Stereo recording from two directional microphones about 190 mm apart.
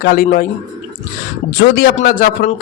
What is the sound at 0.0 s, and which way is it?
Speech, 45° left (ahead or behind).